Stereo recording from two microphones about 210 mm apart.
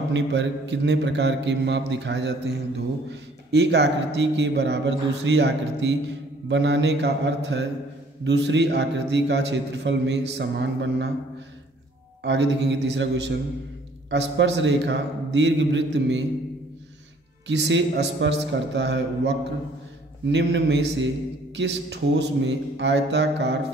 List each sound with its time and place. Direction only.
0.1 s a man's voice: 55° right (ahead or behind)
12.2 s a man's voice: 55° right (ahead or behind)
17.5 s a man's voice: 60° right (ahead or behind)